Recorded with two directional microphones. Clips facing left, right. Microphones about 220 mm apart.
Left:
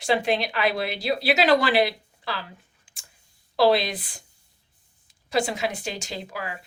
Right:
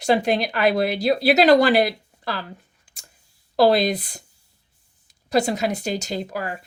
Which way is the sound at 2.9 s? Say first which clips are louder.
Right 4 dB; 40° right (ahead or behind).